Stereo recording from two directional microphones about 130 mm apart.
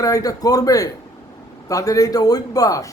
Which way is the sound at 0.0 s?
25° left (ahead or behind).